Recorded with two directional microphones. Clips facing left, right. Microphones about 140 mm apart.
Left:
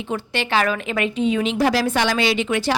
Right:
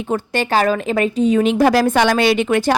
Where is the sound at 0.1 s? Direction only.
40° right (ahead or behind).